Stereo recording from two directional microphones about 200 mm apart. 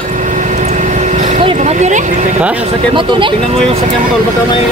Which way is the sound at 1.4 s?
30° right (ahead or behind).